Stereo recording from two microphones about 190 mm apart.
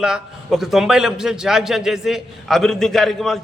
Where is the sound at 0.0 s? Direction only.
Centre (ahead or behind).